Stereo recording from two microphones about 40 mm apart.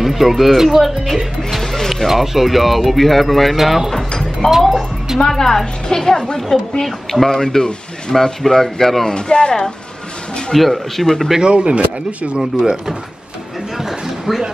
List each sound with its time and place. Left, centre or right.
0.0 s speech: centre
2.0 s speech: centre
4.1 s music: centre
5.2 s speech: centre
9.1 s speech: left
10.5 s speech: centre
11.4 s speech: right
12.4 s speech: centre
13.7 s a sound: centre